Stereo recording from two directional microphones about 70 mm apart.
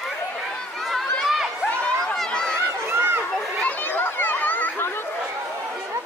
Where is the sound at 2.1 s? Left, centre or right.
Centre.